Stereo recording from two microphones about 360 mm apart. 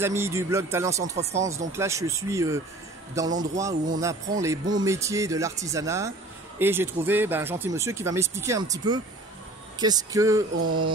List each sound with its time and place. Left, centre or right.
0.0 s speech: centre
10.6 s mantra: right